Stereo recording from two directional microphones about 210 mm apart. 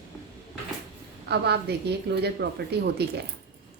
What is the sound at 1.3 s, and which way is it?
A woman's voice, 50° right (ahead or behind).